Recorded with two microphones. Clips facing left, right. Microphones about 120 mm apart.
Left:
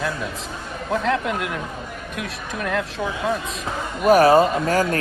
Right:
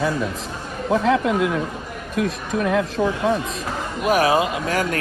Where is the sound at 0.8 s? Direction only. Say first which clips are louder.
Right 4 dB; 5° right (ahead or behind).